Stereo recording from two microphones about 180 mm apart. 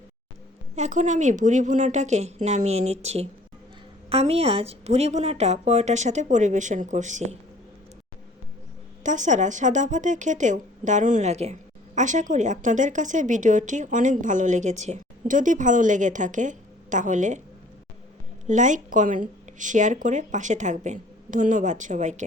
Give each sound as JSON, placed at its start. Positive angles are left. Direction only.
{"t": 0.8, "sound": "a woman's voice", "side_deg": -40}
{"t": 9.0, "sound": "speech", "side_deg": -40}
{"t": 18.4, "sound": "speech", "side_deg": -45}